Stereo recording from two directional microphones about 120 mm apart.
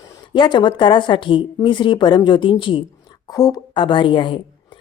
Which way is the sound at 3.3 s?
30° left (ahead or behind).